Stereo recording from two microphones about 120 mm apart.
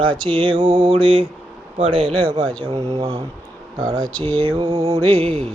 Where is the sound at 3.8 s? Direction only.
35° right (ahead or behind).